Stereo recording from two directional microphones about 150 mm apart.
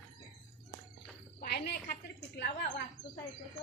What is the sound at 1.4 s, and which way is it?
Frog, 90° left.